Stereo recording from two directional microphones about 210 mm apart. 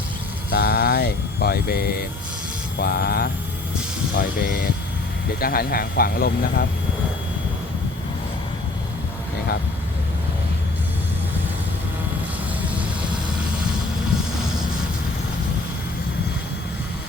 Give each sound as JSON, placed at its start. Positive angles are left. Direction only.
{"t": 0.5, "sound": "speech", "side_deg": 50}